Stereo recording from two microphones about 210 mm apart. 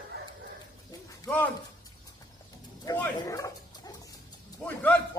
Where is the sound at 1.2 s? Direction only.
10° left (ahead or behind).